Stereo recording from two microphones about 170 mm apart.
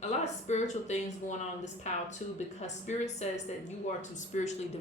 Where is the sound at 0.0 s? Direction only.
40° left (ahead or behind).